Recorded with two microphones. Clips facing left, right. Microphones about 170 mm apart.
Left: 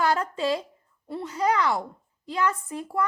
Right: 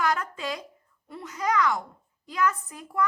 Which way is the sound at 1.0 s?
30° left (ahead or behind).